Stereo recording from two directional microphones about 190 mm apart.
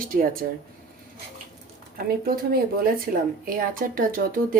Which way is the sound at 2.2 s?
50° right (ahead or behind).